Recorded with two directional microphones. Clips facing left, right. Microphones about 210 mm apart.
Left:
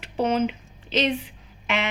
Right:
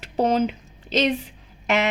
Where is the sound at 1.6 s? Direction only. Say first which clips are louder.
Right 5 dB; 40° right (ahead or behind).